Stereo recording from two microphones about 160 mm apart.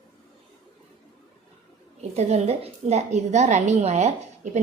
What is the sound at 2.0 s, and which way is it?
A woman's voice, 45° right (ahead or behind).